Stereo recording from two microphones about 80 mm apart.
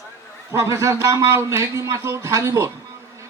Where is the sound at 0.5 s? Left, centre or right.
Right.